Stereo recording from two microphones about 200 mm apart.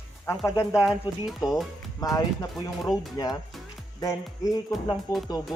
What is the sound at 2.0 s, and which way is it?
Speech, 15° left (ahead or behind).